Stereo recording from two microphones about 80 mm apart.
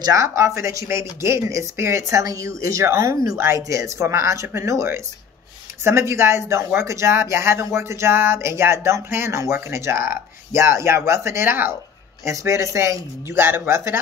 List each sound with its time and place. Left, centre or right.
0.1 s speech: right
12.3 s speech: right